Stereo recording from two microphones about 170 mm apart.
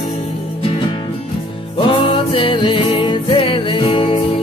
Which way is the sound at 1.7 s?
30° left (ahead or behind).